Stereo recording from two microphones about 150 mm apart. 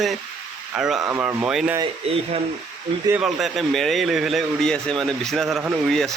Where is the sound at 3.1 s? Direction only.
5° right (ahead or behind).